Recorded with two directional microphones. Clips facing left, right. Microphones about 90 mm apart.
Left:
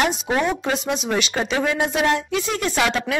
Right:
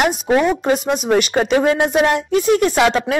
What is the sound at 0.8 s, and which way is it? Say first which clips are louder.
A woman's voice: right 6 dB; 50° right (ahead or behind).